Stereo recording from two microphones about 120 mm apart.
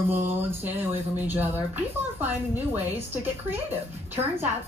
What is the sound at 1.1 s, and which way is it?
Speech, 15° right (ahead or behind).